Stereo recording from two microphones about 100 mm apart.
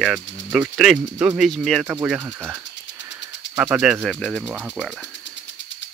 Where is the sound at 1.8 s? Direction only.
10° right (ahead or behind).